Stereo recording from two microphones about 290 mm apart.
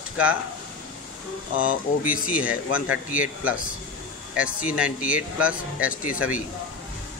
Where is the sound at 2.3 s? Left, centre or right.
Centre.